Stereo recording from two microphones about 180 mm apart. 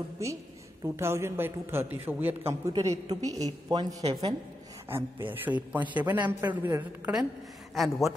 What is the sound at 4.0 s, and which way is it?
Speech, 35° right (ahead or behind).